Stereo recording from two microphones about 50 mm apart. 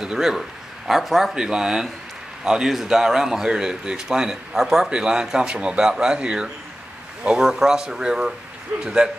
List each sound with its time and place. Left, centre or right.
0.0 s a man's voice: centre
1.3 s speech: centre